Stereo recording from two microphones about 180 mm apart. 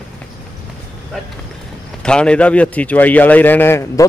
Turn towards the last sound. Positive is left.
turn(degrees=15)  # may be behind; listen again after turning